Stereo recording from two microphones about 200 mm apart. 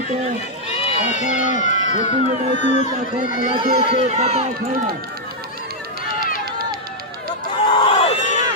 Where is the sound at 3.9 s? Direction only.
30° right (ahead or behind).